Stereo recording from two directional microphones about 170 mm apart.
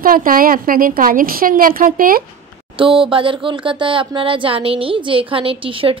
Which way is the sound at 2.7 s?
30° right (ahead or behind).